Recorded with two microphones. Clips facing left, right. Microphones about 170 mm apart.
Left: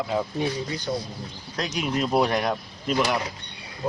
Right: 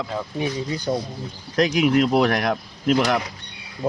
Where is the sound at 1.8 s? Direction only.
85° right.